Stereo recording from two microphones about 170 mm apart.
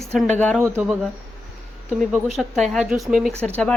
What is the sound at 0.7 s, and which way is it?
Speech, 10° right (ahead or behind).